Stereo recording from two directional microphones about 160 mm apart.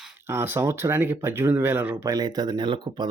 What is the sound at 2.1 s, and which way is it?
Speech, 25° right (ahead or behind).